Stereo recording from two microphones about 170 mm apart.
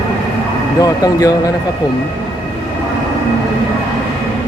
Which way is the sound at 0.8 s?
20° left (ahead or behind).